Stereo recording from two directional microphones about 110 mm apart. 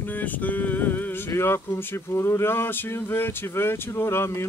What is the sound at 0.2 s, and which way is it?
Speech, 15° left (ahead or behind).